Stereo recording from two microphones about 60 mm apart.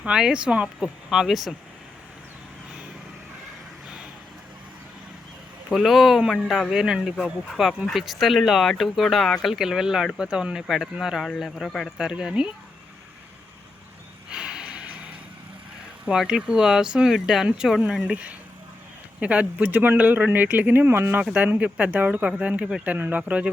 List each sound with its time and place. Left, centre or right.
0.0 s speech: centre
0.8 s speech: centre
5.7 s speech: centre
7.5 s speech: centre
9.6 s speech: centre
11.9 s speech: centre
14.3 s snort: centre
16.0 s speech: centre
17.8 s speech: centre; by 21.2 s right
21.3 s speech: right